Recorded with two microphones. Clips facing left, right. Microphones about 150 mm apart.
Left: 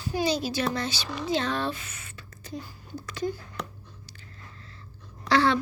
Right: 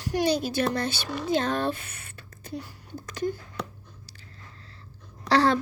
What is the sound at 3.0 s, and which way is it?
Speech, 50° right (ahead or behind).